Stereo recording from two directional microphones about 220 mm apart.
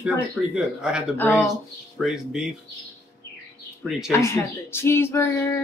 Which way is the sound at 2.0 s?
Centre (ahead or behind).